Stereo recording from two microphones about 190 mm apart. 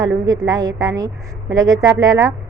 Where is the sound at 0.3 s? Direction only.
20° right (ahead or behind).